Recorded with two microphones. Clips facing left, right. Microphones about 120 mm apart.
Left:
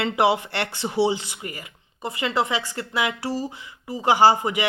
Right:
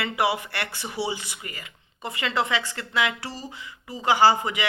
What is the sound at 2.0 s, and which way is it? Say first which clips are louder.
A woman's voice: left 2 dB; 5° left (ahead or behind).